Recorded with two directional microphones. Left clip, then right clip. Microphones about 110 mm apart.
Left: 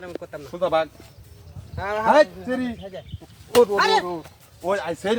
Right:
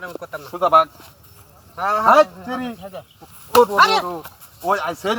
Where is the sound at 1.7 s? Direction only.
Centre (ahead or behind).